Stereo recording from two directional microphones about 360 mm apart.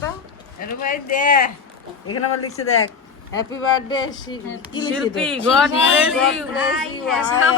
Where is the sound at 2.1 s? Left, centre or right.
Left.